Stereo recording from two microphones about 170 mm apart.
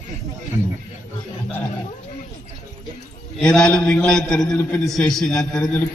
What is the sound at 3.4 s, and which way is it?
A man's voice, 5° left (ahead or behind).